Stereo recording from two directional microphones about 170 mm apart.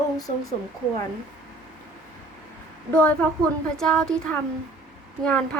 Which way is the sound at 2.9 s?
10° left (ahead or behind).